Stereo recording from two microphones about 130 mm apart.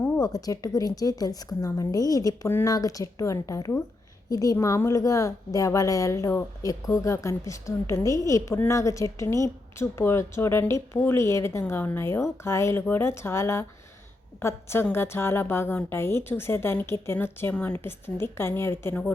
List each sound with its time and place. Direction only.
0.2 s a woman's voice: 25° left (ahead or behind)